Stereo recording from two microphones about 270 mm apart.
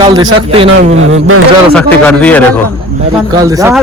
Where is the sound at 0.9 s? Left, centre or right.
Right.